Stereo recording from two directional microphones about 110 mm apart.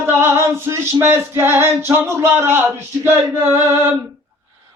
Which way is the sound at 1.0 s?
20° right (ahead or behind).